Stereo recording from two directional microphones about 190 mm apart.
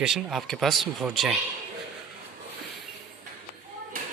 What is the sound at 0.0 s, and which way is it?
Speech, centre (ahead or behind).